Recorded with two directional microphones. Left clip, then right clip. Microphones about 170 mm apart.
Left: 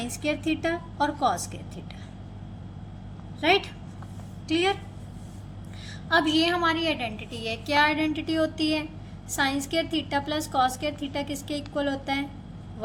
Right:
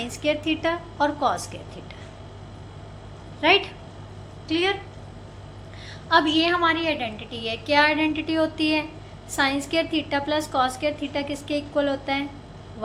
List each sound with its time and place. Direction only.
0.0 s a woman's voice: 25° left (ahead or behind)
3.4 s a woman's voice: 25° left (ahead or behind)
6.1 s a woman's voice: 30° left (ahead or behind)